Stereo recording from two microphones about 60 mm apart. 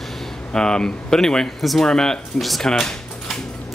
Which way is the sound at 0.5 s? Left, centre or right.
Centre.